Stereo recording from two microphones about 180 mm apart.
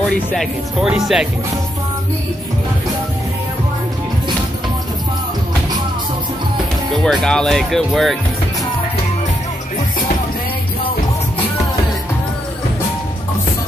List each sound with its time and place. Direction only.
0.3 s speech: 5° right (ahead or behind)
7.1 s speech: centre (ahead or behind)